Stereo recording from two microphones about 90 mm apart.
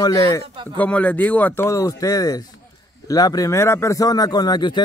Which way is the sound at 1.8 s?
40° left (ahead or behind).